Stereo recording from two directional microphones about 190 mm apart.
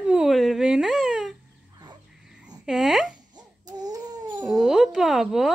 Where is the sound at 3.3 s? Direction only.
20° right (ahead or behind).